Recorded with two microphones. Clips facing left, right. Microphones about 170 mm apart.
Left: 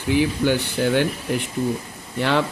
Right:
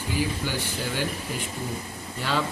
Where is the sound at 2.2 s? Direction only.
70° left (ahead or behind).